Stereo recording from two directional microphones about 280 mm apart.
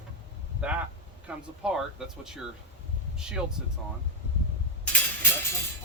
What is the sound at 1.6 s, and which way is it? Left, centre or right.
Speech, centre.